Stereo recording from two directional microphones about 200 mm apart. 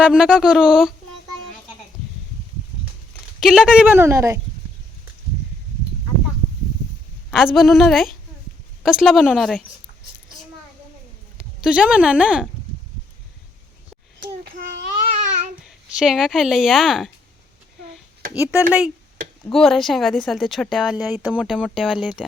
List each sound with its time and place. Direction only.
0.0 s speech: 5° right (ahead or behind)
3.4 s a woman's voice: 5° right (ahead or behind)
7.3 s speech: centre (ahead or behind)
11.3 s a woman's voice: 5° right (ahead or behind)
14.2 s a sound: 45° right (ahead or behind)
15.6 s speech: centre (ahead or behind)
18.3 s a woman's voice: 10° right (ahead or behind)